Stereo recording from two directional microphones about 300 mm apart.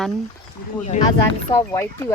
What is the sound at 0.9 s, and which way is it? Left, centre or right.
Speech, left.